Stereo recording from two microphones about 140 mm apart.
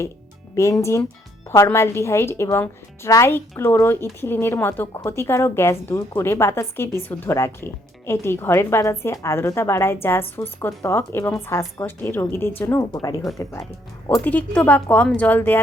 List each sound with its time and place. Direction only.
0.5 s a woman's voice: 20° left (ahead or behind)
14.3 s a woman's voice: 10° left (ahead or behind)